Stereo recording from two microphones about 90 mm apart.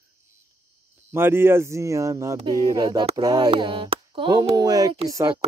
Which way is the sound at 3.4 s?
60° right (ahead or behind).